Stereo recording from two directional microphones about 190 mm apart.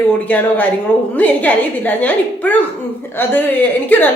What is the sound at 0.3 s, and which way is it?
Speech, 10° left (ahead or behind).